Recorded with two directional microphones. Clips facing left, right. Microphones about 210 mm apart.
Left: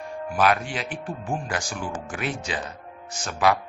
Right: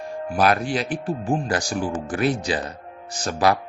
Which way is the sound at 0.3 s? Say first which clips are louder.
Right 3 dB; 35° right (ahead or behind).